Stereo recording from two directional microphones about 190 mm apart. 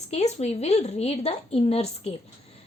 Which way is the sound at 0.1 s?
35° left (ahead or behind).